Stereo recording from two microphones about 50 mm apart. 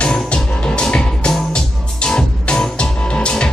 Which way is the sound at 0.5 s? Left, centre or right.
Left.